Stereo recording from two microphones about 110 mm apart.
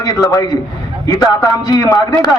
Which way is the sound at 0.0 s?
35° left (ahead or behind).